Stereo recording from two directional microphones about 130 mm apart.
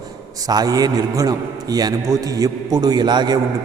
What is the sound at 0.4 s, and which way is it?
A man's voice, 30° right (ahead or behind).